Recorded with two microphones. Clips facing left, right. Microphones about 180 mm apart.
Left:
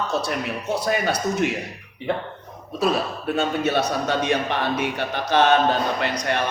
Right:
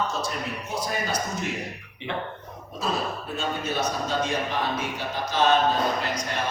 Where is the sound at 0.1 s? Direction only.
65° left (ahead or behind).